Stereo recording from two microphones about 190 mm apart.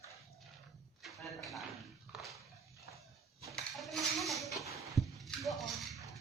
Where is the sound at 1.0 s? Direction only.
Centre (ahead or behind).